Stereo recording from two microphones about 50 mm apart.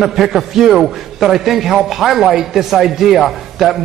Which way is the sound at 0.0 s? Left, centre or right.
Centre.